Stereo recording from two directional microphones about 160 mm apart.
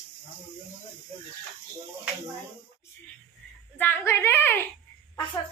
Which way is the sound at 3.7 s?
15° left (ahead or behind).